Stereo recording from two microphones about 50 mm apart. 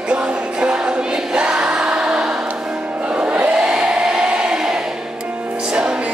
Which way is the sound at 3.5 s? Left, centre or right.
Centre.